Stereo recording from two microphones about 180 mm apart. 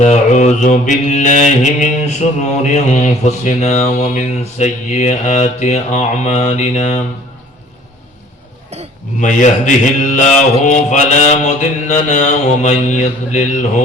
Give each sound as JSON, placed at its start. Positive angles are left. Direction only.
{"t": 0.0, "sound": "speech", "side_deg": 40}
{"t": 9.2, "sound": "speech", "side_deg": 45}